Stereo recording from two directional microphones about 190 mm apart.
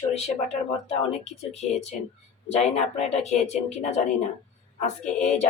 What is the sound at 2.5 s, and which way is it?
Speech, 35° left (ahead or behind).